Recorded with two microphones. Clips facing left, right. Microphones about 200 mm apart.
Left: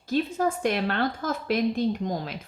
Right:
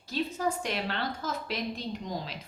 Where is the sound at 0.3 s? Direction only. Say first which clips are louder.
Left 6 dB; 50° left (ahead or behind).